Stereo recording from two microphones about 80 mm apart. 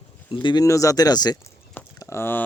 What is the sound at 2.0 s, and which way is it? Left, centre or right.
Speech, left.